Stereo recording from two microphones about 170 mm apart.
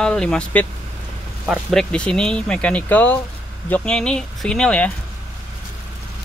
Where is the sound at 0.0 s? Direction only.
5° left (ahead or behind).